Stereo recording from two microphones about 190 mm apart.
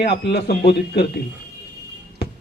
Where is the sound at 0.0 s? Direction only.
60° left (ahead or behind).